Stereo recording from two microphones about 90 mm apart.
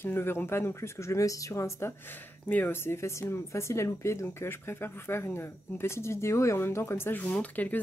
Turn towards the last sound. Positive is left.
turn(degrees=15)  # may be behind; listen again after turning